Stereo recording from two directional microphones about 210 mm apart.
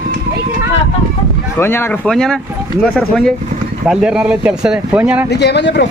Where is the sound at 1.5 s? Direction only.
10° left (ahead or behind); by 5.2 s 5° right (ahead or behind).